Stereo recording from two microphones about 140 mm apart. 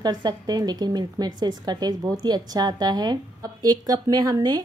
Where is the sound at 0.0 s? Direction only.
30° right (ahead or behind).